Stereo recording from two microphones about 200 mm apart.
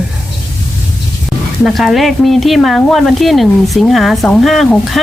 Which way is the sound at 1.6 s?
Centre (ahead or behind).